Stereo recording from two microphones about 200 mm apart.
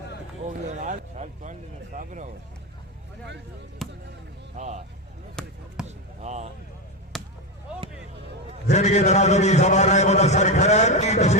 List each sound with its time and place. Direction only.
0.4 s speech: 35° right (ahead or behind)
3.8 s speech: centre (ahead or behind)
4.5 s speech: 35° right (ahead or behind)
5.4 s speech: 5° left (ahead or behind)
5.8 s basketball bounce: 35° right (ahead or behind)
7.1 s basketball bounce: centre (ahead or behind)
8.7 s a man's voice: 35° left (ahead or behind)